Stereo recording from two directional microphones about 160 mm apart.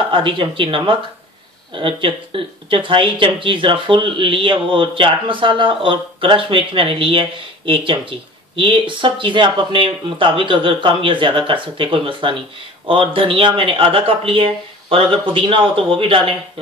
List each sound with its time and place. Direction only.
0.1 s speech: 30° right (ahead or behind)